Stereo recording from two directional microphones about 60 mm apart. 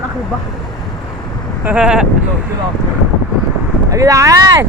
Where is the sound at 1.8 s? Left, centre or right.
Centre.